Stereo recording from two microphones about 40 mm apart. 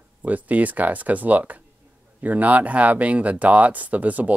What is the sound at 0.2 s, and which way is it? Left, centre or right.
Speech, right.